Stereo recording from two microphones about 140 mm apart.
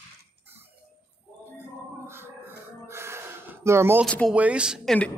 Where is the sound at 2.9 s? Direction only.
20° right (ahead or behind).